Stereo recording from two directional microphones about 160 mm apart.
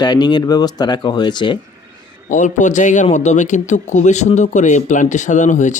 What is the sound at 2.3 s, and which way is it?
A man's voice, 50° left (ahead or behind).